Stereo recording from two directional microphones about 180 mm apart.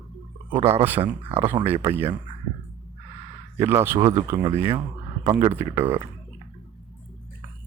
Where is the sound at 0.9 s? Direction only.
10° right (ahead or behind).